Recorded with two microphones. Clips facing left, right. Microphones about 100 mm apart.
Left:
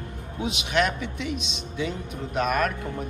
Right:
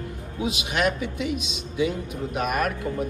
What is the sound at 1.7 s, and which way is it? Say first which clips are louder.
Speech: right 5 dB; 50° left (ahead or behind).